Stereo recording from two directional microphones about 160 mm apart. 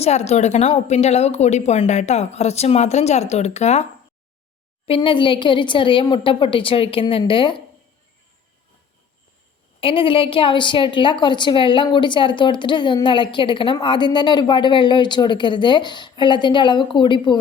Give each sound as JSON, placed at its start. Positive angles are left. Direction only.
{"t": 0.0, "sound": "speech", "side_deg": 45}
{"t": 4.9, "sound": "a woman's voice", "side_deg": 30}
{"t": 9.8, "sound": "a woman's voice", "side_deg": 35}